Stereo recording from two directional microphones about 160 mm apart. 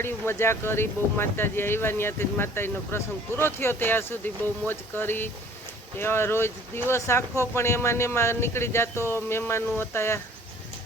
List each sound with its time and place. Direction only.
0.0 s speech: 15° left (ahead or behind)